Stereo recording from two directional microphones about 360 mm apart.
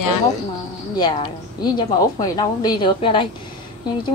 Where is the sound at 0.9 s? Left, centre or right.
Centre.